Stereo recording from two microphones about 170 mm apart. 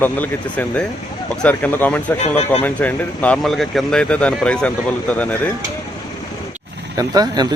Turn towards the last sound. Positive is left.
turn(degrees=-25)  # may be behind; listen again after turning